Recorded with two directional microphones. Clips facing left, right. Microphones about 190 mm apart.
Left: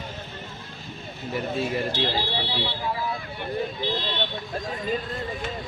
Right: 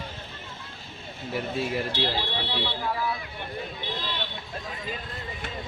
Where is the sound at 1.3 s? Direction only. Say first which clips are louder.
Left 2 dB; 5° right (ahead or behind).